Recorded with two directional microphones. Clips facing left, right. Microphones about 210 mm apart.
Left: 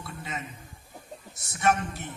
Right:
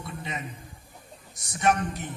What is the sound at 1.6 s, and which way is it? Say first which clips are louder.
Speech: right 1 dB; 15° right (ahead or behind).